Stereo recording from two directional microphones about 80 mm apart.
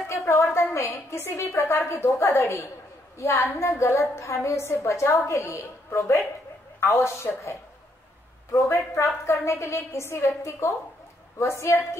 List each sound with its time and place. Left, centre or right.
0.1 s a woman's voice: left